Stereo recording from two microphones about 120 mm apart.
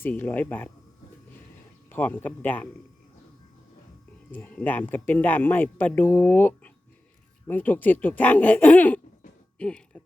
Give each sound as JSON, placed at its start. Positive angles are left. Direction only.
{"t": 0.0, "sound": "speech", "side_deg": 15}
{"t": 1.9, "sound": "speech", "side_deg": 15}
{"t": 4.3, "sound": "speech", "side_deg": 15}